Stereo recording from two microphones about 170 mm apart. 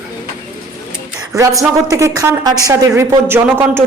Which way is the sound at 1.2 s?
20° right (ahead or behind).